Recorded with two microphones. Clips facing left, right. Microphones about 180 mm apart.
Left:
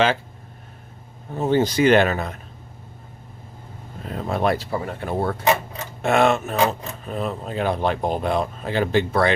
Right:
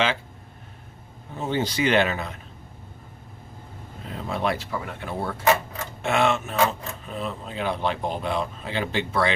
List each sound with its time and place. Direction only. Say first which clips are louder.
1.3 s speech: left 7 dB; 45° left (ahead or behind)
4.1 s speech: left 5 dB; 50° left (ahead or behind)